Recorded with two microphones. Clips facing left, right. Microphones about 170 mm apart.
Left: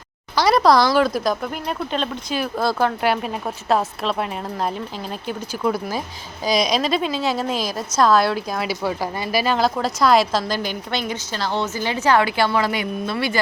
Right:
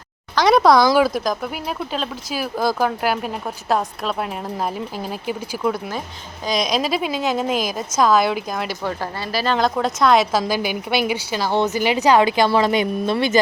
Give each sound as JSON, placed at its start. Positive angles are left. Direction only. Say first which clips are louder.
{"t": 0.3, "sound": "speech", "louder": "right 2 dB", "side_deg": 0}